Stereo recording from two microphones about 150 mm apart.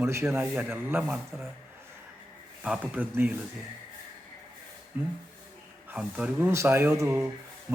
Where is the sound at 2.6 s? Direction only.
10° right (ahead or behind).